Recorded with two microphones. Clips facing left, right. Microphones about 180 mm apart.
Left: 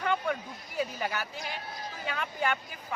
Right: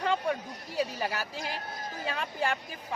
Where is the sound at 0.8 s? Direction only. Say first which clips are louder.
Right 1 dB; 35° right (ahead or behind).